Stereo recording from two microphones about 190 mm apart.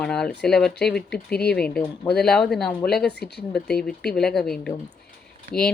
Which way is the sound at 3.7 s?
5° left (ahead or behind).